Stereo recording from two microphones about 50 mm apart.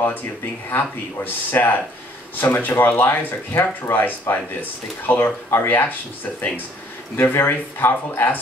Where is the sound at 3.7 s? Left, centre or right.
Left.